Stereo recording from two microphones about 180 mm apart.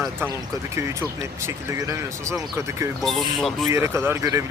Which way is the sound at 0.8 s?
15° right (ahead or behind).